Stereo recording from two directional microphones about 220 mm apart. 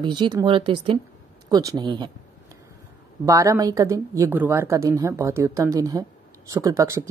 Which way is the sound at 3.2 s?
15° right (ahead or behind).